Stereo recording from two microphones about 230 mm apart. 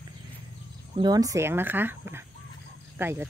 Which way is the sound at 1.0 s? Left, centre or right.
Centre.